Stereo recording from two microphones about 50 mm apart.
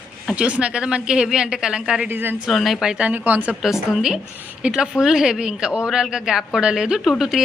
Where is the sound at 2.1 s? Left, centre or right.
Right.